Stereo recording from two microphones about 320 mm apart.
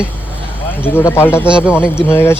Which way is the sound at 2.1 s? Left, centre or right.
Centre.